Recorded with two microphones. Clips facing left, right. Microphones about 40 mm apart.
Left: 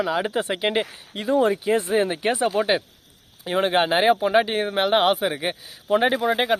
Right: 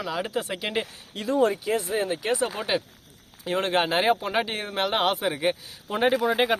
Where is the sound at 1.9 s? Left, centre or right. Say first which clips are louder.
Left 5 dB; left.